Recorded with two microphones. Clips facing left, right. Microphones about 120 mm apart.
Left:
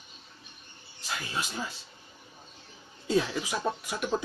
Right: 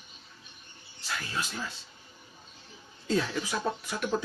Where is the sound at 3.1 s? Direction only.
15° left (ahead or behind).